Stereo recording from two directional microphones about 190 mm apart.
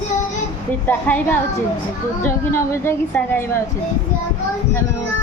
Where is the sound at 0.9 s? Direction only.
10° left (ahead or behind).